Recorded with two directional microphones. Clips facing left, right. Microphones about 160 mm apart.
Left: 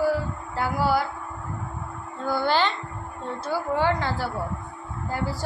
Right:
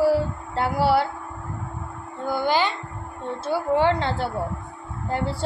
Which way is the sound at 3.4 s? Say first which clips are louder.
Right 4 dB; 25° right (ahead or behind).